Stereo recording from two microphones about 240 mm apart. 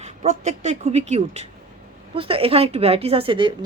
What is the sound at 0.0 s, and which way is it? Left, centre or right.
Speech, right.